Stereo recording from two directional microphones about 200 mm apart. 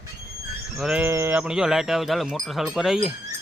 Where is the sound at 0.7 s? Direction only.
5° right (ahead or behind).